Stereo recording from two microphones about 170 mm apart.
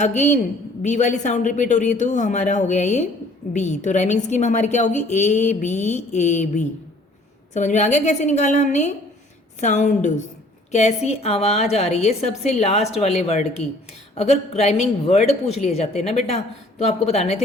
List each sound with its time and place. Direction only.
0.0 s a woman's voice: 45° left (ahead or behind)
7.5 s a woman's voice: 45° left (ahead or behind)